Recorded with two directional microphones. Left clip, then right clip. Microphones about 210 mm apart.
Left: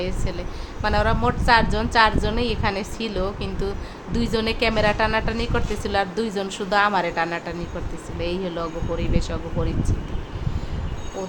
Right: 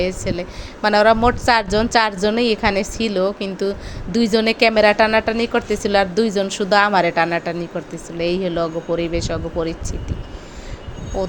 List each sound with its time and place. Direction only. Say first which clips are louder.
0.0 s a woman's voice: right 7 dB; 30° right (ahead or behind)